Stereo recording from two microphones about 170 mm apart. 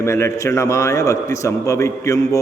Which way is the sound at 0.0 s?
15° left (ahead or behind).